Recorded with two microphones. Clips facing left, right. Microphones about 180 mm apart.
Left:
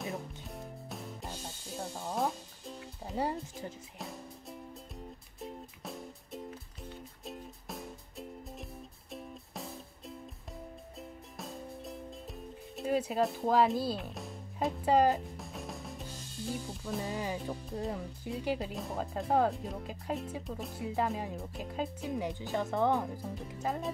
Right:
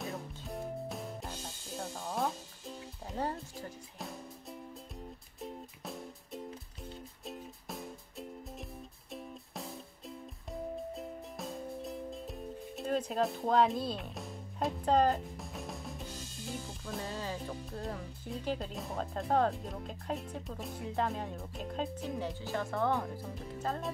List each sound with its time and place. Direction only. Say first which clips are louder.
0.0 s music: left 1 dB; centre (ahead or behind)
16.8 s speech: left 3 dB; 10° left (ahead or behind)
22.2 s speech: left 3 dB; 20° left (ahead or behind)